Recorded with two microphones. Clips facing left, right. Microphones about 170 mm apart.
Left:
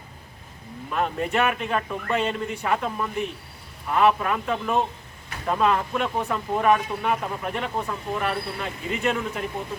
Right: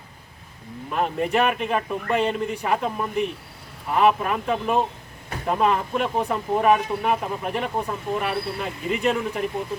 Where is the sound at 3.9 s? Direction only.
5° right (ahead or behind).